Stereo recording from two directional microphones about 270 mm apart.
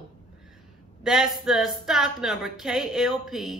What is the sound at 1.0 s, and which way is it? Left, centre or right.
A man's voice, centre.